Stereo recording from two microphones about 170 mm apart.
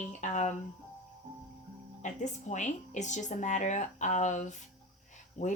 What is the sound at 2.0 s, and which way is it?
Speech, 45° left (ahead or behind).